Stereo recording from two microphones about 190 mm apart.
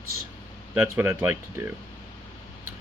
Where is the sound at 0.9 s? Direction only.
10° right (ahead or behind).